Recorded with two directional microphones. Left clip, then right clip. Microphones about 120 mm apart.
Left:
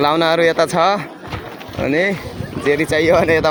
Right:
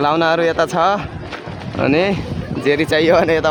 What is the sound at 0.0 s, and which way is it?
Speech, 5° left (ahead or behind).